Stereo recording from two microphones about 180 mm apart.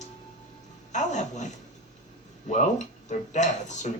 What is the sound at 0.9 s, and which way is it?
Music, 40° left (ahead or behind).